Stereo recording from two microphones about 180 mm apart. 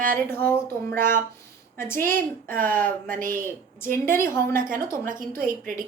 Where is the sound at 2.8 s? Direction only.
50° right (ahead or behind).